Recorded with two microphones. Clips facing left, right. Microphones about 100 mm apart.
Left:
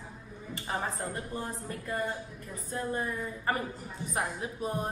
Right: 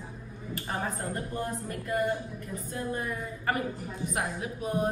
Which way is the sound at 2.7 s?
30° left (ahead or behind).